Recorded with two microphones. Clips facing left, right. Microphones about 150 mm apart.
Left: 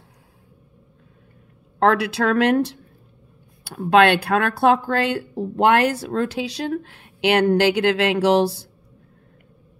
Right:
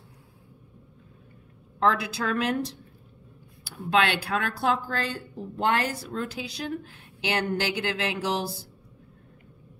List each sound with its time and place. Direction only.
1.8 s speech: 75° left (ahead or behind)